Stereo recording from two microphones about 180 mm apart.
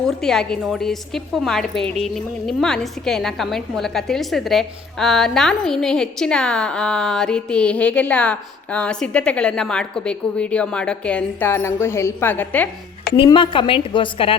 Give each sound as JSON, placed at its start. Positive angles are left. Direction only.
{"t": 0.0, "sound": "a woman's voice", "side_deg": 5}
{"t": 13.1, "sound": "a woman's voice", "side_deg": 25}